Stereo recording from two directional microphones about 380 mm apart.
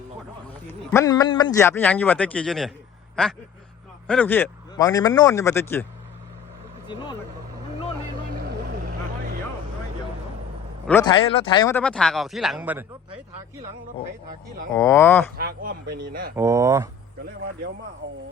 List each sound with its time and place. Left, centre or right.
0.9 s speech: centre
6.8 s speech: centre
8.9 s vehicle: right
10.8 s speech: centre
14.7 s speech: centre
15.4 s speech: right
16.3 s speech: centre